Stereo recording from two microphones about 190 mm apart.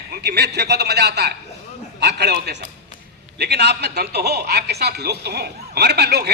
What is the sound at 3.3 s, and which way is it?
A man's voice, 60° right (ahead or behind).